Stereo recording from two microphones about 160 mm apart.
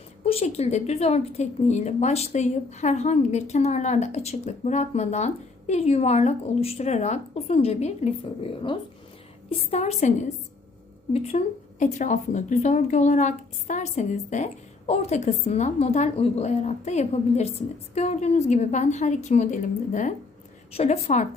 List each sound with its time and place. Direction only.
0.3 s a woman's voice: 40° left (ahead or behind)
9.5 s a woman's voice: 40° left (ahead or behind)